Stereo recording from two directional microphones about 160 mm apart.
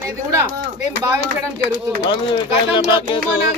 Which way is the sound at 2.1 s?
30° left (ahead or behind).